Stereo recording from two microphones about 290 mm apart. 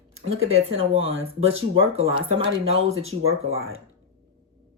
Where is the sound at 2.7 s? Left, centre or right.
Right.